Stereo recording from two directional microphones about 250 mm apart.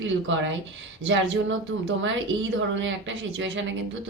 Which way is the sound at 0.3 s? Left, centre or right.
Right.